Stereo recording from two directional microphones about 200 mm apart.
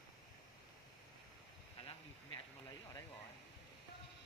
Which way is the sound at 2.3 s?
20° left (ahead or behind).